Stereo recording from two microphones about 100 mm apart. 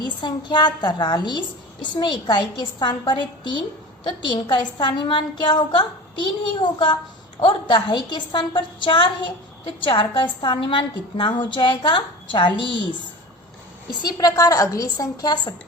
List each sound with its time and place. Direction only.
0.0 s a woman's voice: 45° left (ahead or behind)
14.0 s a woman's voice: 40° left (ahead or behind)